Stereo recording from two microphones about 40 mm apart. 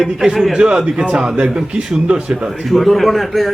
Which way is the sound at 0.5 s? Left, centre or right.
Right.